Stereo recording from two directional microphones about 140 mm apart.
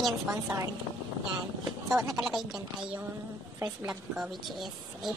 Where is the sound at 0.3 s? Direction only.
25° right (ahead or behind).